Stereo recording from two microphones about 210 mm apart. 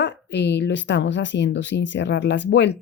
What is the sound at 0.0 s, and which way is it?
Speech, 55° left (ahead or behind).